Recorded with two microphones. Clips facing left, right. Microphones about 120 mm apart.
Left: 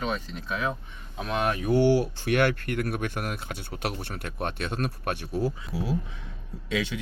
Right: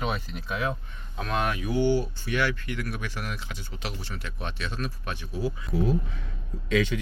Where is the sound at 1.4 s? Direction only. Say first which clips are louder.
Left 2 dB; 35° left (ahead or behind).